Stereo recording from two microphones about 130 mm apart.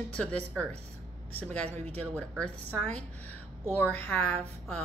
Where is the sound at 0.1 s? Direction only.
10° left (ahead or behind).